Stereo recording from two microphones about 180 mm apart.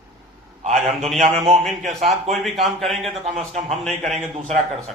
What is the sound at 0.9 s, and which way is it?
A man's voice, centre (ahead or behind).